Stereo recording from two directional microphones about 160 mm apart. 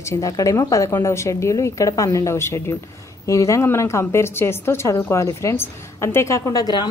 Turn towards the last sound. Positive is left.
turn(degrees=25)  # may be behind; listen again after turning